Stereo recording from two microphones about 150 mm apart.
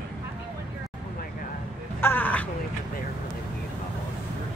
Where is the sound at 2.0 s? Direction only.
10° left (ahead or behind).